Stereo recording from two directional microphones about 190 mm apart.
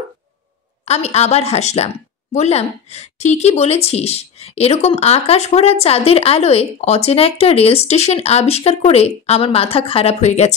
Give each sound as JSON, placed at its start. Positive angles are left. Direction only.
{"t": 0.8, "sound": "a woman's voice", "side_deg": 35}